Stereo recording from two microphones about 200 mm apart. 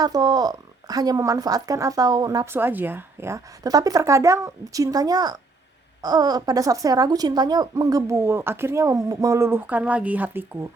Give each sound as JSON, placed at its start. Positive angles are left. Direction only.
{"t": 0.0, "sound": "a woman's voice", "side_deg": -20}